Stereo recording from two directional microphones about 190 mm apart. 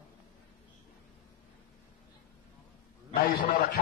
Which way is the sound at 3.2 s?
45° left (ahead or behind).